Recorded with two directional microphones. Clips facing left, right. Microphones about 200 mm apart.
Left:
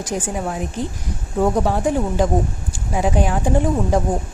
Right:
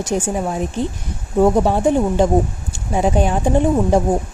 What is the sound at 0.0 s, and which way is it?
Speech, 25° right (ahead or behind).